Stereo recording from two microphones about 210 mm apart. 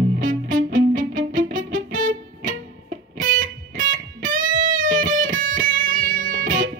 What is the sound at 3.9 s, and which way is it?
Music, 40° right (ahead or behind).